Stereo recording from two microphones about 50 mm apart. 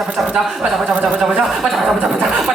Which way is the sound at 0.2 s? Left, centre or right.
Centre.